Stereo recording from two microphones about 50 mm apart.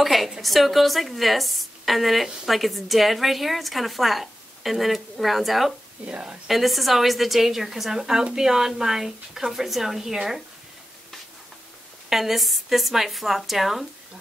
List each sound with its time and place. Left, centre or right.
0.0 s a sound: centre
0.4 s a woman's voice: centre
6.0 s a woman's voice: right
6.4 s a woman's voice: centre
12.1 s a woman's voice: centre